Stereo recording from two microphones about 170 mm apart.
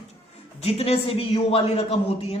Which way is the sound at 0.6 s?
35° left (ahead or behind).